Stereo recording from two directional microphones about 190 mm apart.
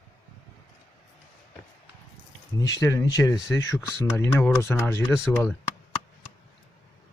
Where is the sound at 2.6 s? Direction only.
15° left (ahead or behind).